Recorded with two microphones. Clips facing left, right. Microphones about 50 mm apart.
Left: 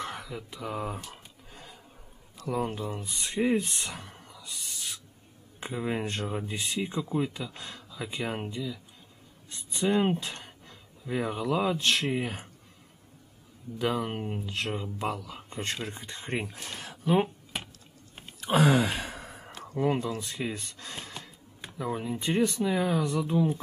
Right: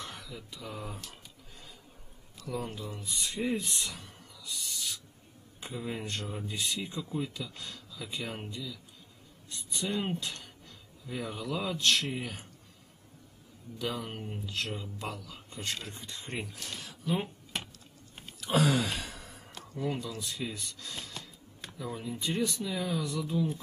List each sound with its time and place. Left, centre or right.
0.0 s speech: left
1.2 s a sound: left
2.4 s speech: left
13.7 s speech: left
17.5 s a sound: centre
18.5 s sigh: centre
19.7 s speech: left